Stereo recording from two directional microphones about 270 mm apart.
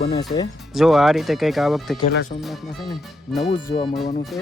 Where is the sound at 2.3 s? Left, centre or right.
Left.